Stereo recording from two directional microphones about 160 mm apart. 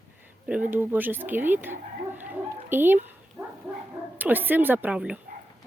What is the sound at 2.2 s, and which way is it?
Chicken, 10° right (ahead or behind).